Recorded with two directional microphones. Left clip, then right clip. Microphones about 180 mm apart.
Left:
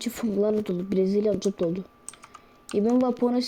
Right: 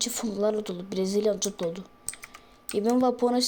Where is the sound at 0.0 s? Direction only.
50° left (ahead or behind).